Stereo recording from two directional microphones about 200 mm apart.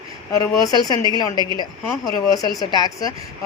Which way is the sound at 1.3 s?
20° right (ahead or behind).